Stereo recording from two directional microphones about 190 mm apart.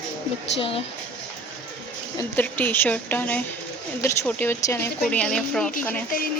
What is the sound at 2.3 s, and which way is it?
Speech, 10° left (ahead or behind).